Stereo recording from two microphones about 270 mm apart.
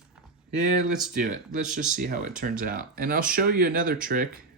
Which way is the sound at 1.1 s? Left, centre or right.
Right.